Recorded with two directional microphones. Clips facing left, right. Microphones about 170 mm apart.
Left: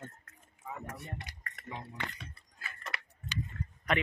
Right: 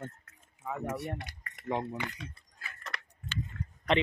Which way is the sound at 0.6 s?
75° right (ahead or behind).